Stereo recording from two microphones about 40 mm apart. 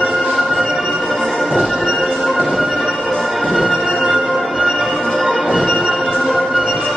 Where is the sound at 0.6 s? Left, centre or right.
Centre.